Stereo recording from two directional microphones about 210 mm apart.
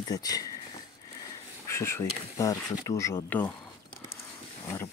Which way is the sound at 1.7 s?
15° left (ahead or behind).